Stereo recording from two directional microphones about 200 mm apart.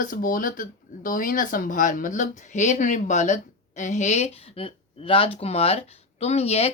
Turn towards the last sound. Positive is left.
turn(degrees=30)  # may be behind; listen again after turning